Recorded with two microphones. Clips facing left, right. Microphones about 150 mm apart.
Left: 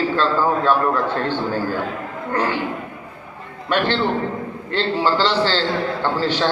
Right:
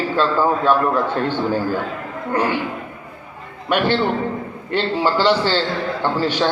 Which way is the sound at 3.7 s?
15° right (ahead or behind).